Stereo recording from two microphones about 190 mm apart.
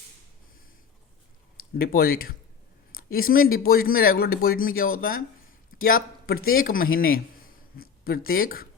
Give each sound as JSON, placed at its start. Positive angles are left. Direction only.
{"t": 1.5, "sound": "a man's voice", "side_deg": 50}